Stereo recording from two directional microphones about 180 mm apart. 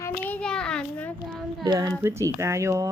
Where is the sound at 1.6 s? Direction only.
20° right (ahead or behind).